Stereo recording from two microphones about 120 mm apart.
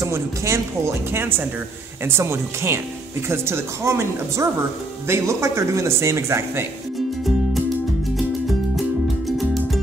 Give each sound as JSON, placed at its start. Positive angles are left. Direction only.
{"t": 0.0, "sound": "speech", "side_deg": -25}